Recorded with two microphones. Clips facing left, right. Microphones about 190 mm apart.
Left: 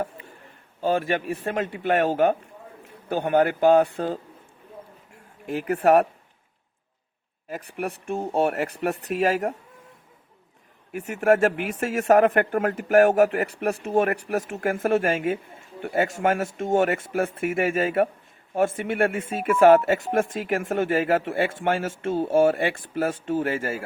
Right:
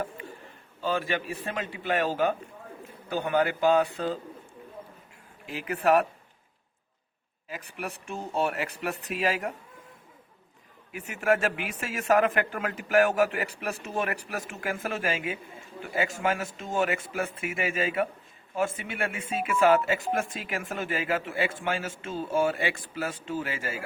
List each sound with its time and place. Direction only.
0.8 s speech: 50° left (ahead or behind)
5.5 s speech: 50° left (ahead or behind)
7.4 s speech: 50° left (ahead or behind)
10.9 s speech: 50° left (ahead or behind)